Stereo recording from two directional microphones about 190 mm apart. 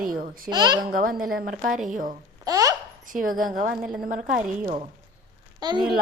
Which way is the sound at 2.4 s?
20° right (ahead or behind).